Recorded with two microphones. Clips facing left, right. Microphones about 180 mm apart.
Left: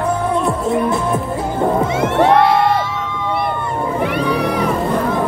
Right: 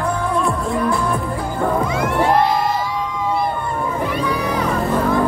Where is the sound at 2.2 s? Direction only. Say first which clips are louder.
Left 4 dB; 70° left (ahead or behind).